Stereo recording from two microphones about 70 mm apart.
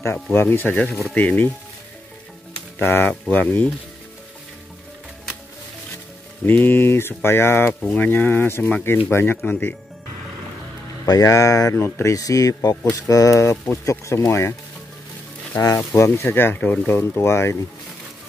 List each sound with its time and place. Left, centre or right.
0.1 s speech: left
2.8 s speech: left
3.1 s speech: left
6.4 s speech: left
7.8 s speech: left
11.2 s speech: left
11.7 s speech: left
12.2 s speech: left
15.7 s speech: left
17.2 s speech: left